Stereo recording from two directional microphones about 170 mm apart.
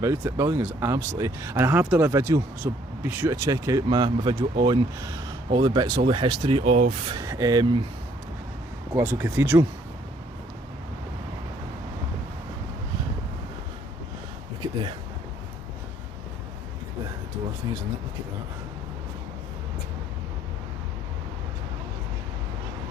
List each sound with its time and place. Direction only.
0.0 s speech: 15° right (ahead or behind); by 6.8 s 35° right (ahead or behind)
7.1 s speech: 20° right (ahead or behind)
9.0 s speech: 15° right (ahead or behind)